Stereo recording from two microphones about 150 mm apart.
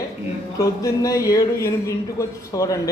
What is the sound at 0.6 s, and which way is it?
A man's voice, 20° left (ahead or behind).